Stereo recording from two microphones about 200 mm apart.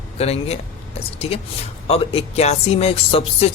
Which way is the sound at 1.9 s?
30° left (ahead or behind).